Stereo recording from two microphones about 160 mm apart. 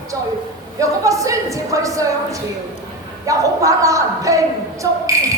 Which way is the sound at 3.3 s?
20° right (ahead or behind).